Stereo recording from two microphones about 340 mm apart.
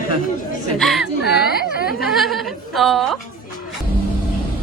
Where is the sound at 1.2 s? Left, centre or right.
Left.